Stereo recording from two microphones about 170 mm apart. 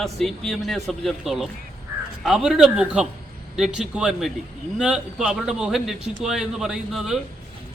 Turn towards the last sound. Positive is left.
turn(degrees=-5)  # may be behind; listen again after turning